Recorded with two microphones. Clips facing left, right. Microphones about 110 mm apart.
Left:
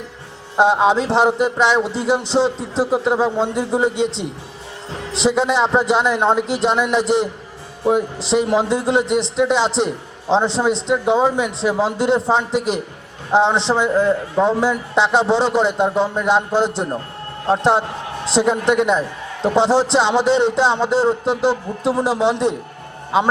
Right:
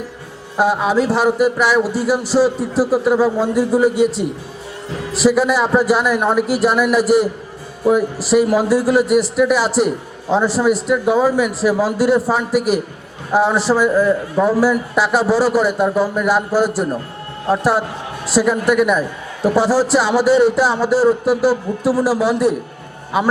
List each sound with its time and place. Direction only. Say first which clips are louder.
0.5 s a man's voice: left 1 dB; 25° left (ahead or behind)